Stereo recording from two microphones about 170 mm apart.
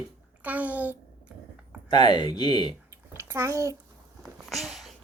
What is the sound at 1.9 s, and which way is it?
Speech, 25° left (ahead or behind).